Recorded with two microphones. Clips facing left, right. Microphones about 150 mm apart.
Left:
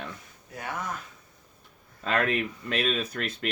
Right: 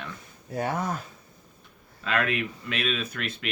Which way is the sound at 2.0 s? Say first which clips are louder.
Left 1 dB; 40° left (ahead or behind).